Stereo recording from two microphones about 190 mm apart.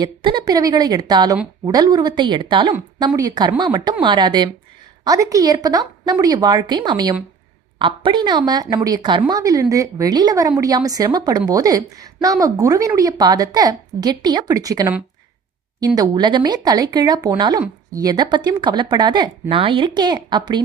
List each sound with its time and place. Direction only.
0.0 s a woman's voice: 25° right (ahead or behind)
16.0 s a woman's voice: 25° right (ahead or behind)